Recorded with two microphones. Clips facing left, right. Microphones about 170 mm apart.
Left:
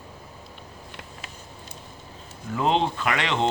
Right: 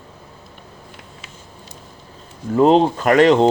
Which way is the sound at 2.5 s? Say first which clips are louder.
Right 10 dB; 40° right (ahead or behind).